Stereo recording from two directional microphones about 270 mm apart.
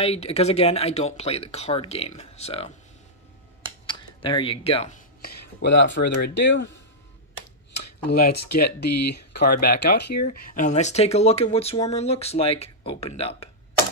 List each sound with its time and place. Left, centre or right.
0.0 s speech: left
3.8 s speech: centre
5.2 s speech: left
8.2 s speech: left
10.2 s speech: left